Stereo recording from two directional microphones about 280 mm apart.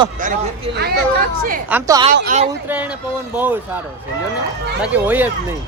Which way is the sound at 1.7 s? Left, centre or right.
Centre.